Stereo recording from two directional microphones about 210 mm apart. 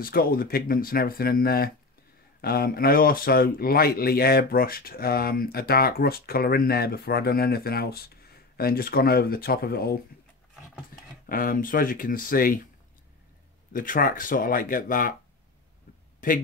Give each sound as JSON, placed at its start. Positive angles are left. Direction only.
{"t": 0.0, "sound": "speech", "side_deg": 45}
{"t": 11.2, "sound": "speech", "side_deg": 40}
{"t": 13.7, "sound": "speech", "side_deg": 40}